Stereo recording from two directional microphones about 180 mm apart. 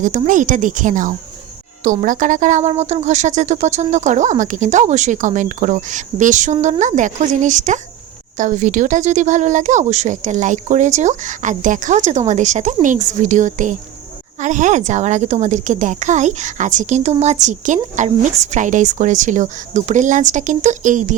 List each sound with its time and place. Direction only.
0.0 s a woman's voice: 45° right (ahead or behind)